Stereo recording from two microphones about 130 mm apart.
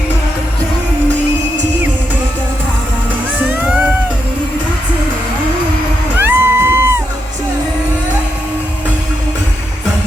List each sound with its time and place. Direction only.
3.4 s music: 10° right (ahead or behind)
6.1 s music: 15° right (ahead or behind)